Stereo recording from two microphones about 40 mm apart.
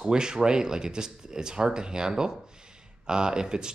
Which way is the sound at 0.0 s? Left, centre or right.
Right.